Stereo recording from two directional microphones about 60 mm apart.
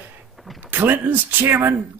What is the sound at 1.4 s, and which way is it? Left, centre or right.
Speech, right.